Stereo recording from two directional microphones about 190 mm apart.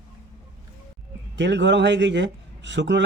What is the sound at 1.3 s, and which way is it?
A man's voice, 70° right (ahead or behind).